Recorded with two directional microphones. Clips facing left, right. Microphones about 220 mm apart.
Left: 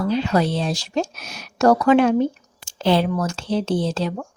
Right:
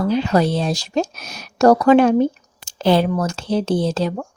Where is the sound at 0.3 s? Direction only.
40° right (ahead or behind).